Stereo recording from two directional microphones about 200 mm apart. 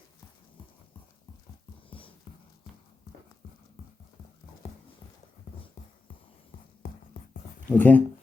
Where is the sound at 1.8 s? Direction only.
25° left (ahead or behind).